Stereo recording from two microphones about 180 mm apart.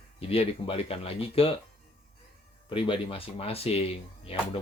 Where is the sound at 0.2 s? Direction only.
30° left (ahead or behind).